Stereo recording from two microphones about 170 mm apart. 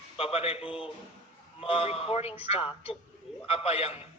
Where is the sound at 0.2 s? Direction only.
35° left (ahead or behind).